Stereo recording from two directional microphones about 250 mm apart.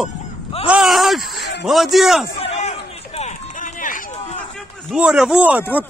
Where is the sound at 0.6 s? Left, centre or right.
Centre.